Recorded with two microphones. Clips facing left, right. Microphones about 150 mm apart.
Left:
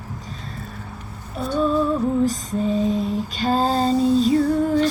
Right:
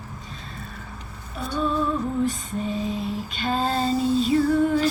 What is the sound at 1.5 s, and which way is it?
Music, 40° left (ahead or behind).